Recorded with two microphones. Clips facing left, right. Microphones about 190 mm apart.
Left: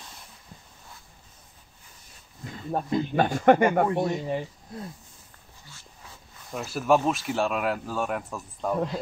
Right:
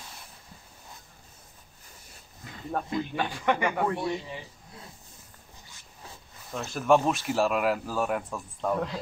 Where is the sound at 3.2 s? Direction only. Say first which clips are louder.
Left 10 dB; 45° left (ahead or behind).